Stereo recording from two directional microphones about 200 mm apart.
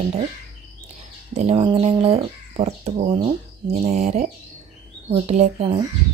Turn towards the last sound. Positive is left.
turn(degrees=-30)  # may be behind; listen again after turning